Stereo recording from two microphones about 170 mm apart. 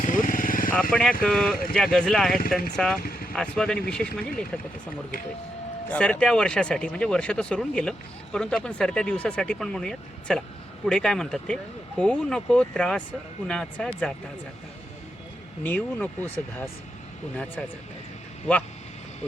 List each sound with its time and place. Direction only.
0.0 s vehicle: 50° left (ahead or behind)
0.7 s speech: 5° left (ahead or behind)
3.0 s vehicle: 60° left (ahead or behind)
3.3 s speech: 5° left (ahead or behind)
5.9 s speech: 5° left (ahead or behind)
15.6 s speech: 10° left (ahead or behind)